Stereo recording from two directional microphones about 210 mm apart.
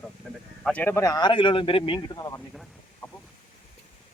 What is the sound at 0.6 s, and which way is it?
Speech, 5° left (ahead or behind).